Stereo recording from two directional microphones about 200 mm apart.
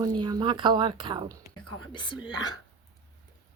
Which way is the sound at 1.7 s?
25° left (ahead or behind).